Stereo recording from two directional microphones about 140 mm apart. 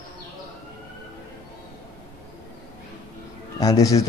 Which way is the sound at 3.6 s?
25° left (ahead or behind).